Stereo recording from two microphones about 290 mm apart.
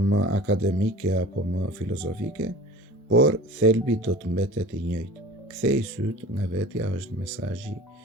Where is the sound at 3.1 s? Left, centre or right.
Right.